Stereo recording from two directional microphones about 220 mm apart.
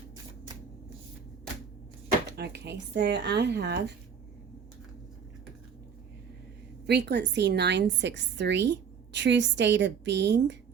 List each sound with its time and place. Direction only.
2.3 s a woman's voice: 50° right (ahead or behind)
6.8 s a woman's voice: 50° right (ahead or behind)